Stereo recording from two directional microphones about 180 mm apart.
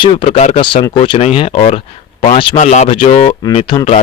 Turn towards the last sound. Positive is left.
turn(degrees=30)  # may be behind; listen again after turning